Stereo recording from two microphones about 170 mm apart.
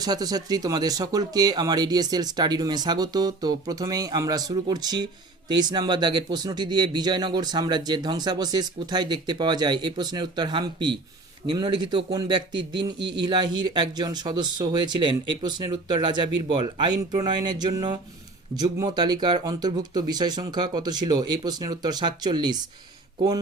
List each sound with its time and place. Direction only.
0.0 s speech: 20° right (ahead or behind)